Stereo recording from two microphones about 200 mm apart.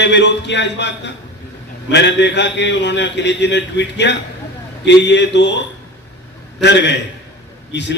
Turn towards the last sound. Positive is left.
turn(degrees=60)  # may be behind; listen again after turning